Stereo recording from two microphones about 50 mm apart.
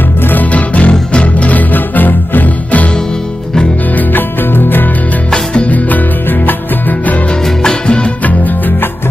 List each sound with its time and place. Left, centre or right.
0.2 s music: left
3.9 s music: left
5.3 s music: left
7.4 s music: centre
8.2 s music: left